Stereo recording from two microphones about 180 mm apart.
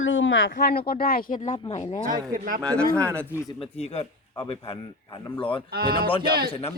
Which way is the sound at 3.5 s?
35° left (ahead or behind).